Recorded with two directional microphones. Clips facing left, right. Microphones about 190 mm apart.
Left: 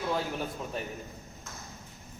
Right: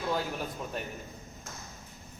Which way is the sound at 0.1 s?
Centre (ahead or behind).